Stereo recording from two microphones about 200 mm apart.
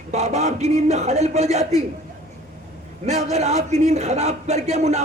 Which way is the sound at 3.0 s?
35° right (ahead or behind).